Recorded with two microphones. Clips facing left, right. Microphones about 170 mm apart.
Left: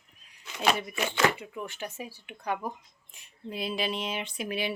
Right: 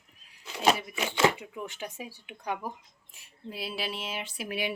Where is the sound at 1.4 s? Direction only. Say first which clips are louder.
Left 1 dB; 15° right (ahead or behind).